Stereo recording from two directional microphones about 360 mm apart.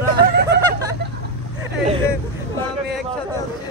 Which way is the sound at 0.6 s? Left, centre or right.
Centre.